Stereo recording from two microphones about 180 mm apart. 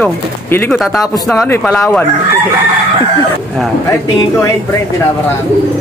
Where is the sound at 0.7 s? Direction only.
Centre (ahead or behind).